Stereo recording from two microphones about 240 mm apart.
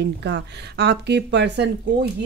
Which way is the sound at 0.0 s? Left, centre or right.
Right.